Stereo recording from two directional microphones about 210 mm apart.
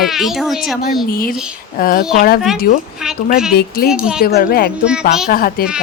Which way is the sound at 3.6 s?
45° left (ahead or behind).